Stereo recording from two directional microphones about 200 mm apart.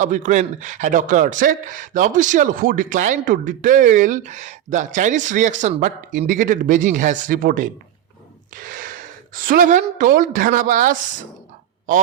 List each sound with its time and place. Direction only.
0.0 s speech: 40° right (ahead or behind)